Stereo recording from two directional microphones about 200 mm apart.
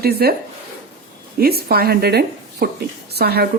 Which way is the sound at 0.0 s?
50° right (ahead or behind).